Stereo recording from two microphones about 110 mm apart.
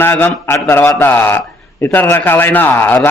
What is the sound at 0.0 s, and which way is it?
A man's voice, 20° left (ahead or behind).